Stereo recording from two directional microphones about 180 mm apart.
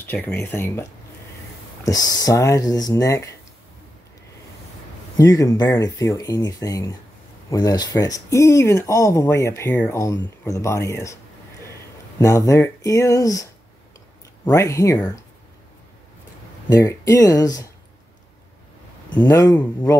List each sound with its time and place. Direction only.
0.0 s speech: 10° left (ahead or behind)
1.9 s speech: 20° left (ahead or behind)
5.1 s speech: 20° left (ahead or behind)
12.2 s speech: 15° left (ahead or behind)
16.6 s speech: 15° left (ahead or behind)
19.2 s speech: 20° left (ahead or behind)